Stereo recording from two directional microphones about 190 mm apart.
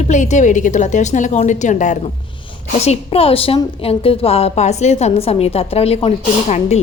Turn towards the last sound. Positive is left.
turn(degrees=35)  # may be behind; listen again after turning